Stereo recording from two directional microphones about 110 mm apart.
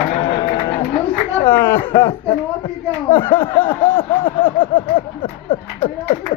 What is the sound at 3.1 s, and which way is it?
Speech, 15° left (ahead or behind).